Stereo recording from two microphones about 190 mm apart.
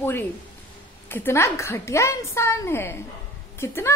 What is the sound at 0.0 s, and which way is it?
Speech, 10° left (ahead or behind).